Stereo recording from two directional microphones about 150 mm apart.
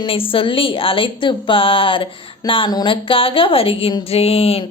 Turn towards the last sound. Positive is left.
turn(degrees=40)  # may be behind; listen again after turning